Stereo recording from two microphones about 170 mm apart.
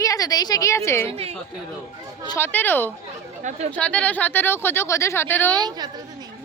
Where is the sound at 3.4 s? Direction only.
45° right (ahead or behind).